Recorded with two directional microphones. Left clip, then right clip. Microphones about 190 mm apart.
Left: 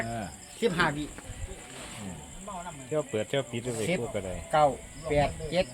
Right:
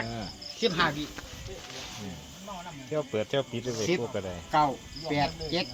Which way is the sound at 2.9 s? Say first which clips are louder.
Even; 5° left (ahead or behind).